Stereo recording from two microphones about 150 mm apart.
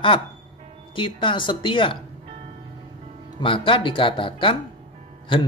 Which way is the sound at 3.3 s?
35° left (ahead or behind).